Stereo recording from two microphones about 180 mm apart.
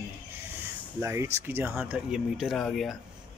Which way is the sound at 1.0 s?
15° right (ahead or behind).